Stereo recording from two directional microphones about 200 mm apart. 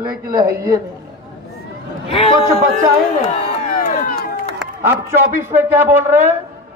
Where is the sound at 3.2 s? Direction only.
30° left (ahead or behind).